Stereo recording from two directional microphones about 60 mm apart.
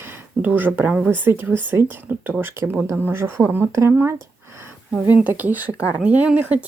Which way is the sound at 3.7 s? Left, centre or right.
Right.